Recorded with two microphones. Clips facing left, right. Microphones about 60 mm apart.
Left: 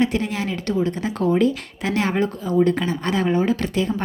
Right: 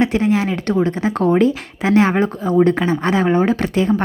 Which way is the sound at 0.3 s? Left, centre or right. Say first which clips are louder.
Right 5 dB; right.